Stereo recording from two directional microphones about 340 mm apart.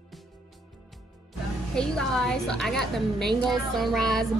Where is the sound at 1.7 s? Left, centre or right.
Centre.